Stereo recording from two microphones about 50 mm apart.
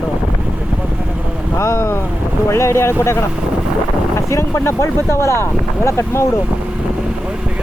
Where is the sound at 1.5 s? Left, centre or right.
Left.